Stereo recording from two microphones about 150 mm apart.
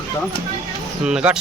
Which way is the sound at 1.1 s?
5° right (ahead or behind).